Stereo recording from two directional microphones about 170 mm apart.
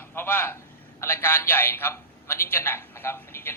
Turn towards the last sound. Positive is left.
turn(degrees=15)  # may be behind; listen again after turning